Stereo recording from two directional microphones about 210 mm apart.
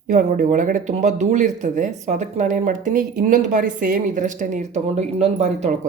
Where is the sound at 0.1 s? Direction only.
35° right (ahead or behind).